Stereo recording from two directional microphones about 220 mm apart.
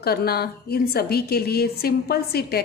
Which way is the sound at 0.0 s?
45° left (ahead or behind).